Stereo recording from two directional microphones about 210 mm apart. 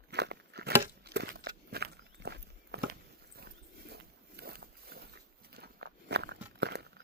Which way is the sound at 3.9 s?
50° right (ahead or behind).